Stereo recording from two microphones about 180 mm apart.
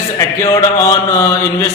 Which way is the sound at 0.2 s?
15° left (ahead or behind).